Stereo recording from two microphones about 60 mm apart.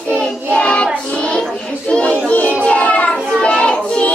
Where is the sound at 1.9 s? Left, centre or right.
Left.